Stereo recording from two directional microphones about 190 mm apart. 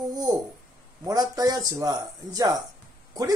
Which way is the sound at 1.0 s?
20° right (ahead or behind).